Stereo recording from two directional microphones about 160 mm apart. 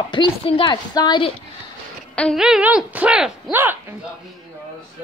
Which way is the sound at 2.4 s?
5° right (ahead or behind).